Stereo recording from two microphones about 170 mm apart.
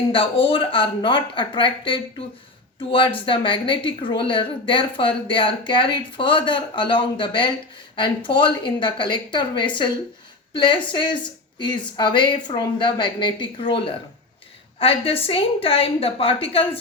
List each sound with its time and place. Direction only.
0.1 s speech: 30° left (ahead or behind)
3.2 s speech: 30° left (ahead or behind)